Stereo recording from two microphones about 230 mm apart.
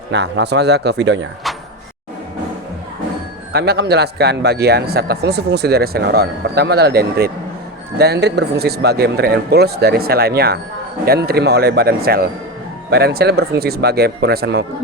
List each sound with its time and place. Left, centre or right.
0.1 s speech: right
3.5 s speech: right